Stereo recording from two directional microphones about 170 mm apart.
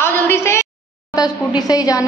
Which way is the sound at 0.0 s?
15° left (ahead or behind).